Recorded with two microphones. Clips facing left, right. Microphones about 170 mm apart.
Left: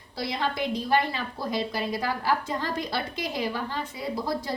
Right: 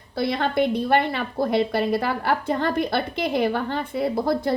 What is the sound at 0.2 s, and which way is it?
A woman's voice, 60° right (ahead or behind).